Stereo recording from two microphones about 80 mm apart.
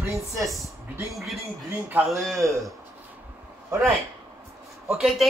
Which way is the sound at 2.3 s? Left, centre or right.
Right.